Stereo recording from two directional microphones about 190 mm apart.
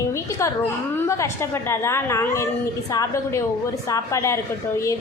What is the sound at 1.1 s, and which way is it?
A woman's voice, 15° left (ahead or behind).